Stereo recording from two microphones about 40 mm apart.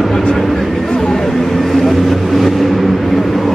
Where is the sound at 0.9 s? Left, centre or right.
Centre.